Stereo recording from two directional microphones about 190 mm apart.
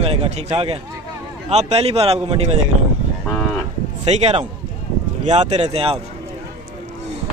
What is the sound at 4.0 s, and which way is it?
A man's voice, 35° right (ahead or behind).